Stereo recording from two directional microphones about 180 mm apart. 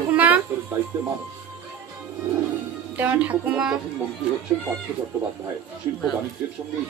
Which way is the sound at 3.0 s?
10° right (ahead or behind).